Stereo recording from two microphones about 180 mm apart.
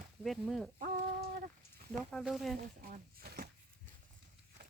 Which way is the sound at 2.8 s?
55° right (ahead or behind).